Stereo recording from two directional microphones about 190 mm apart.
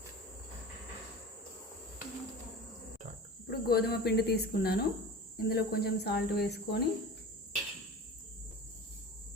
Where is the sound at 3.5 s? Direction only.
55° left (ahead or behind).